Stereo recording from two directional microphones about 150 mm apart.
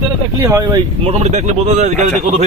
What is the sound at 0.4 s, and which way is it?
Speech, 20° right (ahead or behind).